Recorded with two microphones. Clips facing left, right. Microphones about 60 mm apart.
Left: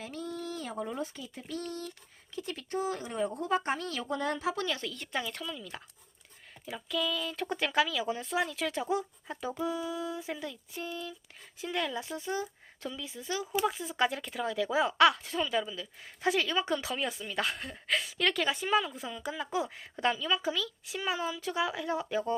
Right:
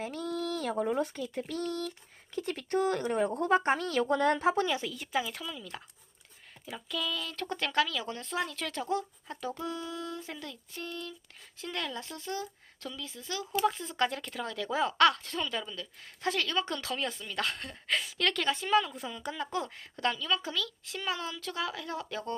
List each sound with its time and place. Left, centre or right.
0.0 s a sound: right
0.3 s speech: right
4.6 s speech: centre
6.7 s speech: centre